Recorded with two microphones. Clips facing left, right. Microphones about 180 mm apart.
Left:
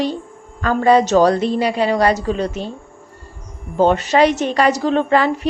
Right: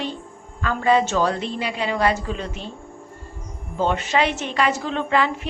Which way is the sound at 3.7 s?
40° left (ahead or behind).